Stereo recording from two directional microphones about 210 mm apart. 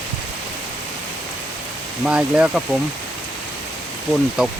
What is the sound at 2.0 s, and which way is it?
Speech, 5° right (ahead or behind).